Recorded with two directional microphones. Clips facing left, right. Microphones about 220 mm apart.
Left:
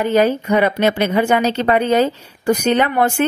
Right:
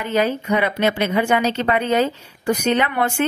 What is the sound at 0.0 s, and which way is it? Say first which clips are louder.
A woman's voice: left 5 dB; 40° left (ahead or behind).